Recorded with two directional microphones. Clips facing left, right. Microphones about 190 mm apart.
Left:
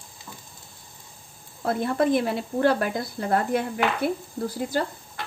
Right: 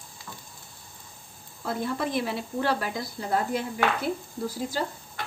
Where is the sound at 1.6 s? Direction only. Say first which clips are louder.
Left 6 dB; 55° left (ahead or behind).